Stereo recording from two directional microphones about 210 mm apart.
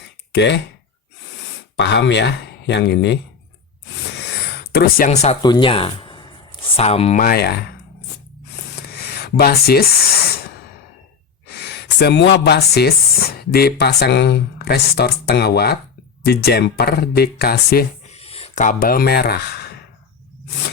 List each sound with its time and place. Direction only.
0.3 s speech: 55° left (ahead or behind)
1.7 s speech: 60° left (ahead or behind)
4.1 s a sound: 50° left (ahead or behind)
5.0 s speech: 30° left (ahead or behind)
5.4 s speech: 20° left (ahead or behind)
7.2 s speech: 45° left (ahead or behind)
8.9 s a sound: 50° left (ahead or behind)
11.4 s speech: 50° left (ahead or behind)
18.1 s a sound: 30° left (ahead or behind); by 19.8 s 50° left (ahead or behind)